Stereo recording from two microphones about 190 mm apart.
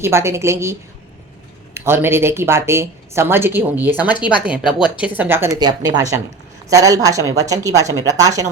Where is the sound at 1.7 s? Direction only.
10° right (ahead or behind).